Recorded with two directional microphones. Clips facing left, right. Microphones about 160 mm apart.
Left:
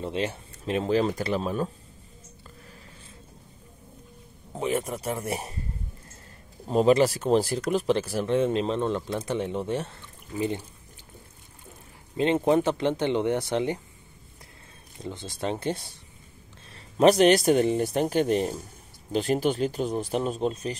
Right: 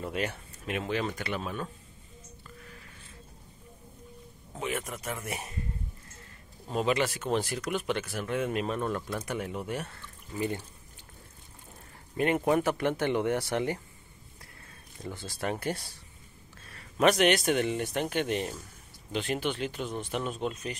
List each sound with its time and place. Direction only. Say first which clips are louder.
0.0 s a man's voice: left 4 dB; 25° left (ahead or behind)
4.6 s a man's voice: left 7 dB; 35° left (ahead or behind)
6.7 s speech: left 8 dB; 40° left (ahead or behind); by 10.6 s 20° left (ahead or behind)
12.2 s speech: left 4 dB; 25° left (ahead or behind)
15.0 s speech: left 3 dB; 20° left (ahead or behind)
16.7 s a man's voice: left 6 dB; 30° left (ahead or behind)